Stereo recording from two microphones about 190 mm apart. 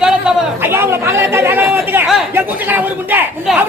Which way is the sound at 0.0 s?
10° right (ahead or behind).